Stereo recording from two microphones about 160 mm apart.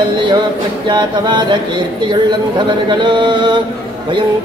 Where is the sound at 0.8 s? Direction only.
30° right (ahead or behind).